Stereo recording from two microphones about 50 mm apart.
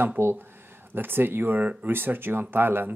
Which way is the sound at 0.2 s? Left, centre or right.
Right.